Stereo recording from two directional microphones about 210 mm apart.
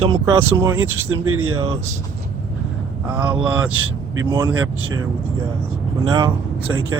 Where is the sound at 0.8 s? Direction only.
85° right.